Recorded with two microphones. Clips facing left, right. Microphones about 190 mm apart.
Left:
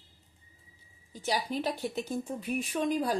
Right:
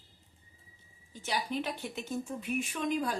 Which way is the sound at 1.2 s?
35° left (ahead or behind).